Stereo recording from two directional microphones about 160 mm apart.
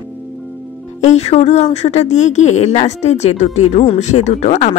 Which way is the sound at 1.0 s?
45° left (ahead or behind).